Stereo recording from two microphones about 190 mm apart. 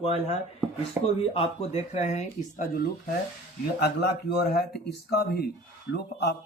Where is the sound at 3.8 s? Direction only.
60° left (ahead or behind).